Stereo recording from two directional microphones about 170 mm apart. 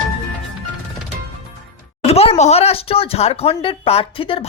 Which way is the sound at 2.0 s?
35° left (ahead or behind).